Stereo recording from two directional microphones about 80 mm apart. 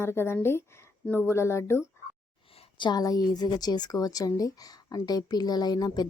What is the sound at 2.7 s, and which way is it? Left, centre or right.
Speech, left.